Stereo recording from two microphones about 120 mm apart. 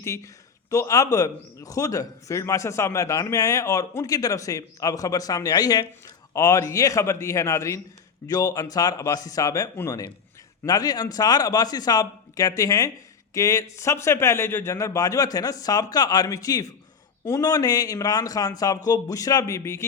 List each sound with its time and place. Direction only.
0.0 s a man's voice: 25° left (ahead or behind)